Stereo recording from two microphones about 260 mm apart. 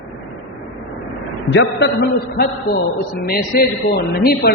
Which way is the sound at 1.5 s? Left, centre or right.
Left.